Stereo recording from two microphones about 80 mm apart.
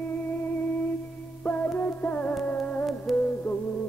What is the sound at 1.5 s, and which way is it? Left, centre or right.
Music, left.